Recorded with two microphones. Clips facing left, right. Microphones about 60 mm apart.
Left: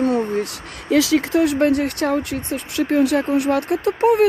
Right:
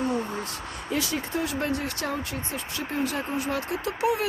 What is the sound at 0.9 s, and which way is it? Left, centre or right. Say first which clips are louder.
Speech: left 13 dB; left.